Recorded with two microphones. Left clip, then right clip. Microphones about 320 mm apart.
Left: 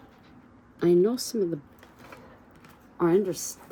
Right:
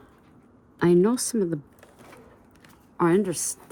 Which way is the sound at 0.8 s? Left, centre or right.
Right.